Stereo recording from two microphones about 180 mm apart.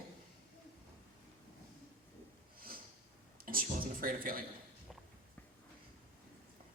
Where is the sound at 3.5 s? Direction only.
50° right (ahead or behind).